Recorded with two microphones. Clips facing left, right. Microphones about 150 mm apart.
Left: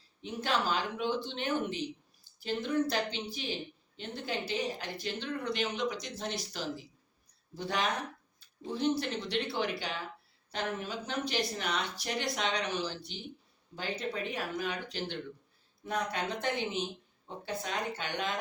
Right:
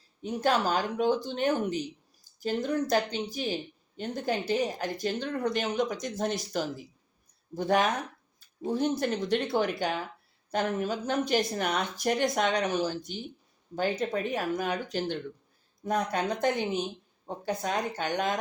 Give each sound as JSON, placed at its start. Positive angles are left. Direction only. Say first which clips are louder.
{"t": 0.2, "sound": "speech", "louder": "right 6 dB", "side_deg": -45}